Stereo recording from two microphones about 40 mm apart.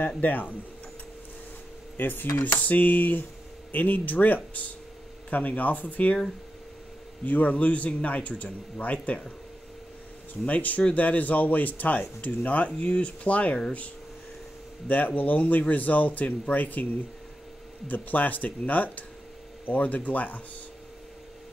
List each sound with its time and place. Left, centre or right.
0.2 s speech: left
2.0 s cutlery: left
2.6 s speech: left
7.2 s speech: left
10.4 s speech: left
14.9 s speech: left
17.8 s speech: left